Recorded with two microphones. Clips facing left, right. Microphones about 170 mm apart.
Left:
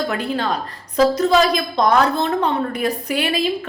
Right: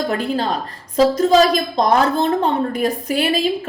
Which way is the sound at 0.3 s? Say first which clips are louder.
Right 1 dB; 35° right (ahead or behind).